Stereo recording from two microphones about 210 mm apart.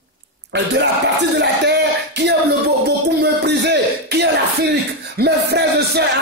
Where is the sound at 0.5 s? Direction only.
55° right (ahead or behind).